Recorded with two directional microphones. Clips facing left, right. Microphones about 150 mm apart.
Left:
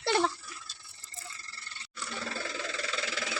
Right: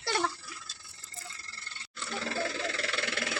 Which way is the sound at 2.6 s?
75° right (ahead or behind).